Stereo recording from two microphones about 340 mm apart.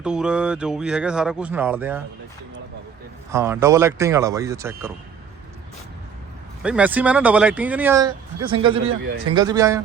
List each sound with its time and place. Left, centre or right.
0.0 s speech: centre
3.3 s speech: centre
6.6 s speech: centre
8.8 s speech: right
9.3 s speech: centre